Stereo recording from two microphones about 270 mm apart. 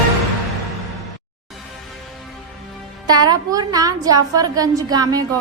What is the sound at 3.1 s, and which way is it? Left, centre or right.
A woman's voice, centre.